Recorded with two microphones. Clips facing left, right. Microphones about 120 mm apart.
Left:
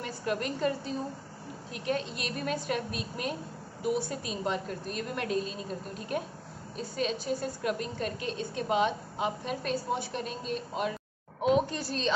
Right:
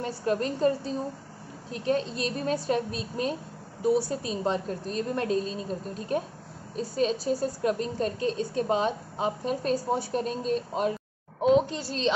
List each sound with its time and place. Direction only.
0.0 s a woman's voice: 30° right (ahead or behind)
11.4 s speech: 25° right (ahead or behind)